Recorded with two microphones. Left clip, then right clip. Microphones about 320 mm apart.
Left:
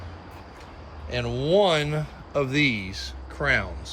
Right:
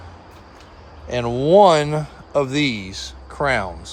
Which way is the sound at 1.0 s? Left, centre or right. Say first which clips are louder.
Right 7 dB; right.